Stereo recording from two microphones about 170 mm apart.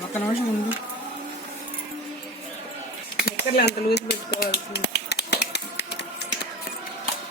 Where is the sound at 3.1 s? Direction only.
75° left (ahead or behind).